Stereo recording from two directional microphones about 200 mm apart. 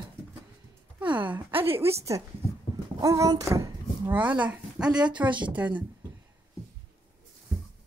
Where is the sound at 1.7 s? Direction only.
10° right (ahead or behind).